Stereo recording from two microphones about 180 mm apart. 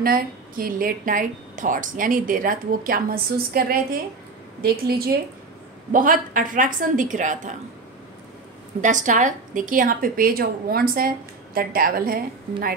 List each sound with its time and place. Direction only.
0.0 s a woman's voice: 55° right (ahead or behind)
8.8 s a woman's voice: 45° right (ahead or behind)